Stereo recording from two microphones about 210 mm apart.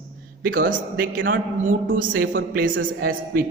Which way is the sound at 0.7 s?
40° right (ahead or behind).